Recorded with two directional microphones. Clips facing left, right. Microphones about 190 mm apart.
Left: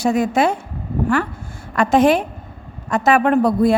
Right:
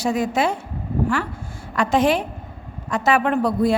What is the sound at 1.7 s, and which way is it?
A woman's voice, 50° left (ahead or behind).